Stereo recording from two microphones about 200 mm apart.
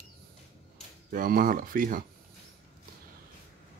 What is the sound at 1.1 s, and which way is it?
Speech, 45° right (ahead or behind).